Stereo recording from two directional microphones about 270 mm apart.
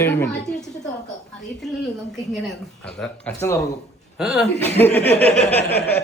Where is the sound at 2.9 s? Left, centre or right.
Centre.